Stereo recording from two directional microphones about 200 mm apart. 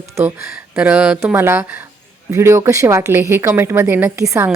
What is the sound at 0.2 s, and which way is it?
A woman's voice, 15° right (ahead or behind).